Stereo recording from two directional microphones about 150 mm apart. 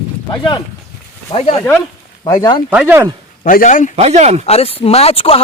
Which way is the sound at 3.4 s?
60° left (ahead or behind).